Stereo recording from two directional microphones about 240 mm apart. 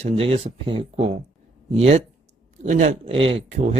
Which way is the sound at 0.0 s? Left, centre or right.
Right.